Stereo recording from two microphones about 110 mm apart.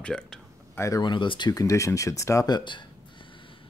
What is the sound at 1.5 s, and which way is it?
Speech, 30° left (ahead or behind).